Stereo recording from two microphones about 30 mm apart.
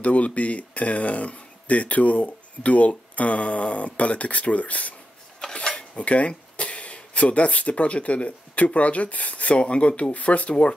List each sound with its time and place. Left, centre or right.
0.0 s speech: left
5.4 s cutlery: left
5.9 s speech: left
9.6 s speech: left
10.1 s speech: left